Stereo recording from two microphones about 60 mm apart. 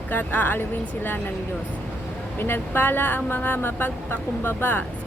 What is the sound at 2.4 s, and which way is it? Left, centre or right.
Speech, left.